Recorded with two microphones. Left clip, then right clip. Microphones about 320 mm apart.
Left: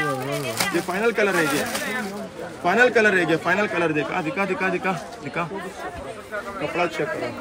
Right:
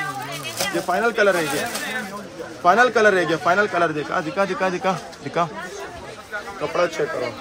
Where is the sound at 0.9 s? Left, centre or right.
Centre.